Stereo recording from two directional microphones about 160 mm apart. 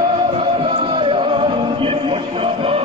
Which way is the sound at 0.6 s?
35° right (ahead or behind).